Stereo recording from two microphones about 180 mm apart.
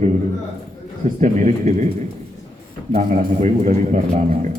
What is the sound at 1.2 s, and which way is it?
Speech, 40° right (ahead or behind).